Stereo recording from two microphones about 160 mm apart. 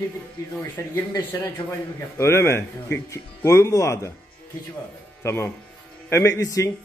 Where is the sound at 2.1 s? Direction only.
15° left (ahead or behind).